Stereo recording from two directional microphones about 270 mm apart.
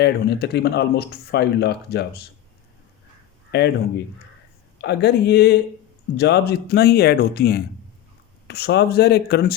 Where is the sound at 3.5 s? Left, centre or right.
Left.